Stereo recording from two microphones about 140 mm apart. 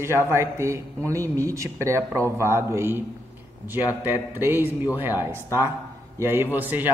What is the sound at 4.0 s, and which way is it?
Speech, 15° right (ahead or behind).